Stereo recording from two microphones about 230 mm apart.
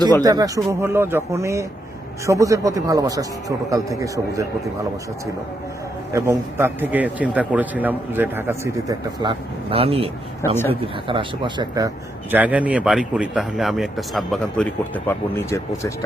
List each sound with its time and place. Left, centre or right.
0.2 s a man's voice: centre
6.1 s a man's voice: centre
11.1 s speech: right
12.3 s speech: centre